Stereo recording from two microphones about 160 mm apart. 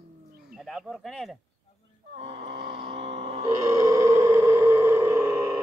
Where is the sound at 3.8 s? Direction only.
20° right (ahead or behind).